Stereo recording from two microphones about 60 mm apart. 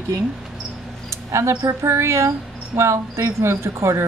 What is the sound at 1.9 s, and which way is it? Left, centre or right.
Speech, right.